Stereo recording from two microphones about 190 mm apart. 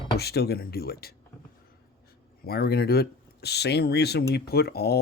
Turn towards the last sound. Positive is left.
turn(degrees=55)  # may be behind; listen again after turning